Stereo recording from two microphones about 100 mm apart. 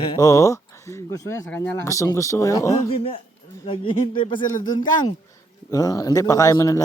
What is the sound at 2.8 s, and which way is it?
Speech, 80° left.